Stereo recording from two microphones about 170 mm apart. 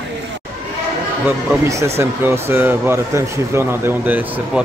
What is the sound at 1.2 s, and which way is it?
Speech, 15° right (ahead or behind).